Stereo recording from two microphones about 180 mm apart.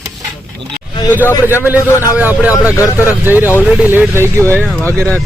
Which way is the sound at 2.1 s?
10° right (ahead or behind).